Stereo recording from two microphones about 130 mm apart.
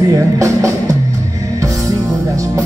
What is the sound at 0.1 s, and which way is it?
Music, 25° right (ahead or behind).